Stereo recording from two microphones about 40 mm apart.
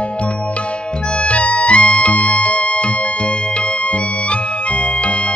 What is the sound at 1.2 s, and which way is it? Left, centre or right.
Music, left.